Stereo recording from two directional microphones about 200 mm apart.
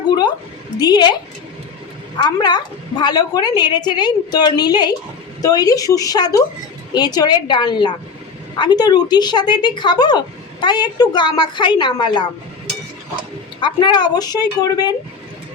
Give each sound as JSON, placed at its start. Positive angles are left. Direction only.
{"t": 0.8, "sound": "a woman's voice", "side_deg": 20}
{"t": 2.1, "sound": "a woman's voice", "side_deg": 20}
{"t": 13.6, "sound": "a woman's voice", "side_deg": 25}